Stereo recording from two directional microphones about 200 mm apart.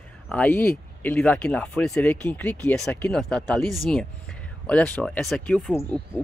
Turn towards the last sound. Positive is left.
turn(degrees=10)  # may be behind; listen again after turning